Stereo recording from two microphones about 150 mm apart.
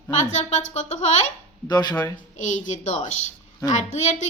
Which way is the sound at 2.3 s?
55° left (ahead or behind).